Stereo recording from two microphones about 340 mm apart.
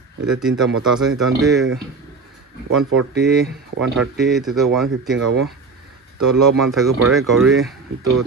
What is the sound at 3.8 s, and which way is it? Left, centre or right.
Speech, centre.